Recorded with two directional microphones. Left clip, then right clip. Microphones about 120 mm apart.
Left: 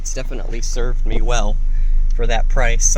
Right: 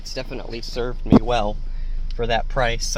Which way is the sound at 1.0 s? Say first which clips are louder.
Right 7 dB; 20° right (ahead or behind).